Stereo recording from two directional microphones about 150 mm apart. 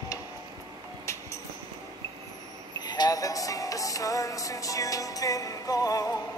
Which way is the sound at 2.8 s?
25° left (ahead or behind).